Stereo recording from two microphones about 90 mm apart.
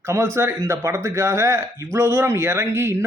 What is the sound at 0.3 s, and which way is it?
A man's voice, 30° right (ahead or behind).